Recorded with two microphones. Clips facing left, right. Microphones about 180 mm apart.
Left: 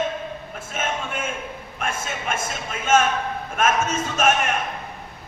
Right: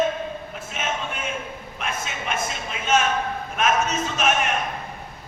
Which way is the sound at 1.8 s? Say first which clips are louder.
Left 2 dB; 50° left (ahead or behind).